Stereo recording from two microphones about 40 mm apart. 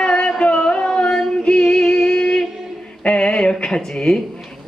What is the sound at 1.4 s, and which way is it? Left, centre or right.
Music, left.